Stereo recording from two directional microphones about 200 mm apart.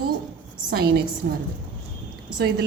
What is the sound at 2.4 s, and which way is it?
Speech, 50° right (ahead or behind).